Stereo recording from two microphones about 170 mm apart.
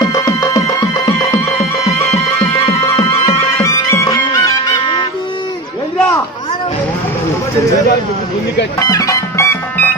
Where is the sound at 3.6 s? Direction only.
15° left (ahead or behind).